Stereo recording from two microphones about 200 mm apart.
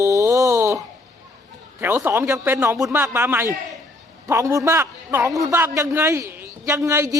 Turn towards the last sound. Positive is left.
turn(degrees=-15)  # may be behind; listen again after turning